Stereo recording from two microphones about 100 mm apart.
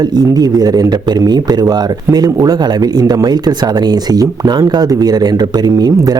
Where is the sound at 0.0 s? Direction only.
40° right (ahead or behind).